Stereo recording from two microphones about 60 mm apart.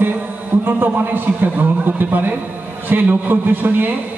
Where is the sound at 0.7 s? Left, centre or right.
Right.